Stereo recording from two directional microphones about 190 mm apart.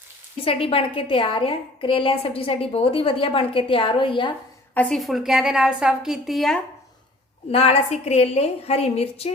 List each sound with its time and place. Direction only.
0.4 s a woman's voice: 30° left (ahead or behind)
4.7 s a woman's voice: 5° left (ahead or behind)
7.5 s a woman's voice: 30° left (ahead or behind)